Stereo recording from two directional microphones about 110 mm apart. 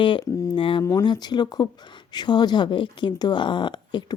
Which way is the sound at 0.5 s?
50° left (ahead or behind).